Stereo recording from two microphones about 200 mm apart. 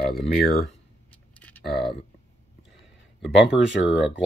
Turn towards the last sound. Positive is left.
turn(degrees=-5)  # may be behind; listen again after turning